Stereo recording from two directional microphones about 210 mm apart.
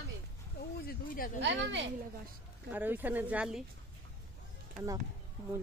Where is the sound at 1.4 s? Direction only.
55° right (ahead or behind).